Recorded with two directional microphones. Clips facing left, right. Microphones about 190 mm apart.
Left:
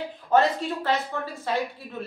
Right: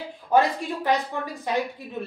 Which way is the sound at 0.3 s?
15° right (ahead or behind).